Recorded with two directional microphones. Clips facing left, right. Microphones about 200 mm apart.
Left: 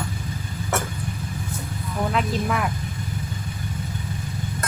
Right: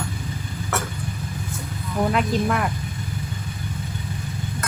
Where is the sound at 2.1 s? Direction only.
Centre (ahead or behind).